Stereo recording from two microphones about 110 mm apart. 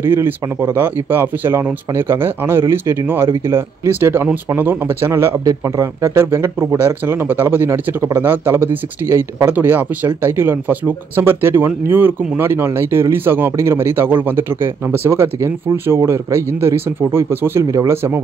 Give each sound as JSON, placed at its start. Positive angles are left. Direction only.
{"t": 0.0, "sound": "speech", "side_deg": -20}